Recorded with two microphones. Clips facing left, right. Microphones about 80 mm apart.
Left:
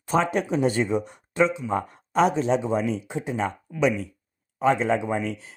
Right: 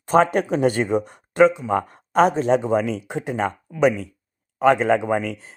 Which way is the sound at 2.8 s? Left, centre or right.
Right.